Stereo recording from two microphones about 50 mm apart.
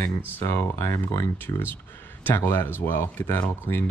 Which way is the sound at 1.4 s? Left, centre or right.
Left.